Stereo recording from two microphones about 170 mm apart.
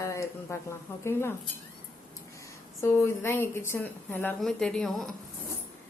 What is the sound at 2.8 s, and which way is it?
A woman's voice, 15° left (ahead or behind).